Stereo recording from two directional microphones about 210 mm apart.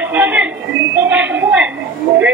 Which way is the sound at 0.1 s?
5° right (ahead or behind).